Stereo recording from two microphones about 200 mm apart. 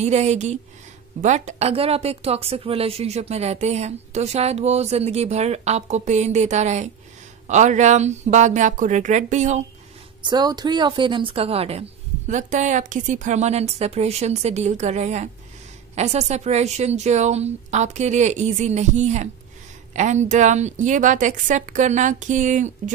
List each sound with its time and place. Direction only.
0.0 s a woman's voice: 35° right (ahead or behind)
10.2 s a woman's voice: 20° right (ahead or behind); by 22.9 s 40° right (ahead or behind)